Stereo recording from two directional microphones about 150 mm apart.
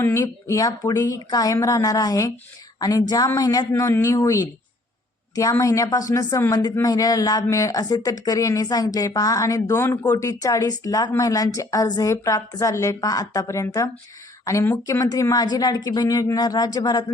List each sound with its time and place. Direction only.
0.0 s a woman's voice: 20° left (ahead or behind)